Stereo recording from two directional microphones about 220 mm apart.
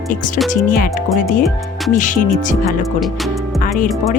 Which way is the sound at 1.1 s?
Centre (ahead or behind).